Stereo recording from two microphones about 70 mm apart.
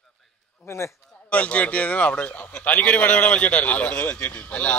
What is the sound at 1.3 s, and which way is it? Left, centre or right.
A man's voice, centre.